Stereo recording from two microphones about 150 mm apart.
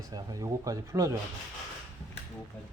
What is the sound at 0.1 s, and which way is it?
Speech, 25° right (ahead or behind).